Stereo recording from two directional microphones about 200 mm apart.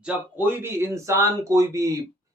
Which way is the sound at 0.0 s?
5° right (ahead or behind).